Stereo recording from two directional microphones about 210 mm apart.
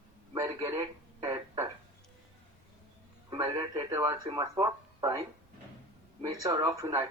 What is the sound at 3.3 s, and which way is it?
Speech, 15° right (ahead or behind).